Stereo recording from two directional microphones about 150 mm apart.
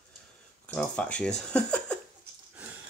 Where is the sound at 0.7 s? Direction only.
10° left (ahead or behind).